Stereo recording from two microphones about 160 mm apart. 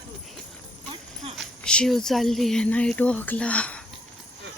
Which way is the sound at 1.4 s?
5° left (ahead or behind).